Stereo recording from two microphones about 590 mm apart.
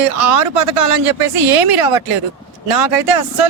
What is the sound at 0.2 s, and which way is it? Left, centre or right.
Speech, right.